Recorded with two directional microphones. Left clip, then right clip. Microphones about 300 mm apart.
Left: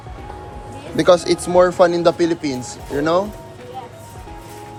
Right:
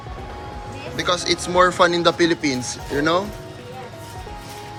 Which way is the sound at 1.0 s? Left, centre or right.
Centre.